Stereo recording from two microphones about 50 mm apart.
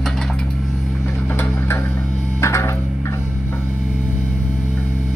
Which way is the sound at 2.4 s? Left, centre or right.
Left.